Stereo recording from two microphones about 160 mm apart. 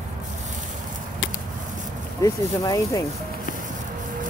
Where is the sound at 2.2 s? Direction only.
20° left (ahead or behind).